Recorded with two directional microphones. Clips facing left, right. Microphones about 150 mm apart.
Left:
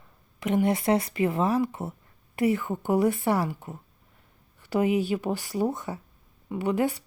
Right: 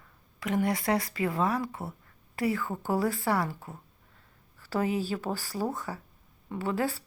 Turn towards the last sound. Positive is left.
turn(degrees=20)  # may be behind; listen again after turning